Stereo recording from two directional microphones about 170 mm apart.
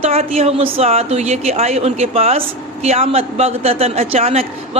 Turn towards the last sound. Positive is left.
turn(degrees=-35)  # may be behind; listen again after turning